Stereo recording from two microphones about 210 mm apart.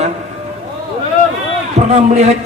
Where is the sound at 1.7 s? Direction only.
30° right (ahead or behind).